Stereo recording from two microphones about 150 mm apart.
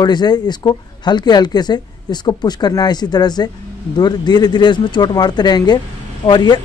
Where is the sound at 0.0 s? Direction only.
30° left (ahead or behind).